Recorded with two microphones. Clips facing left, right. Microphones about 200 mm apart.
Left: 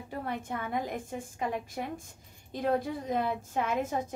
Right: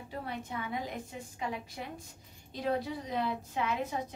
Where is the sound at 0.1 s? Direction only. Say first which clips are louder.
Left 4 dB; 50° left (ahead or behind).